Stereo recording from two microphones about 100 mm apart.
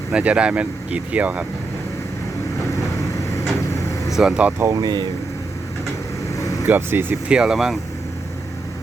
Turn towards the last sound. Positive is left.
turn(degrees=-5)  # may be behind; listen again after turning